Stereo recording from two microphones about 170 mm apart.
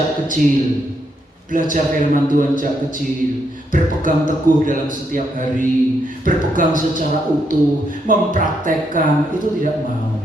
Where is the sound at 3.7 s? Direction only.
50° right (ahead or behind).